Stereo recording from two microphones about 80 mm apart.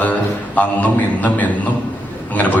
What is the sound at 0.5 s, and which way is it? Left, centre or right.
Speech, centre.